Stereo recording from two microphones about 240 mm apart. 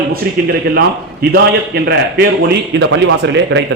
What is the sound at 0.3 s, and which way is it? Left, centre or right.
A man's voice, right.